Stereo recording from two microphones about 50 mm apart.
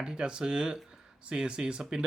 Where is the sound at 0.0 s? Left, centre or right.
Centre.